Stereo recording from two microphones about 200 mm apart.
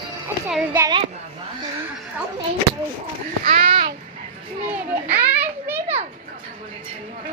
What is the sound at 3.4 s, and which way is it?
Speech, 30° right (ahead or behind).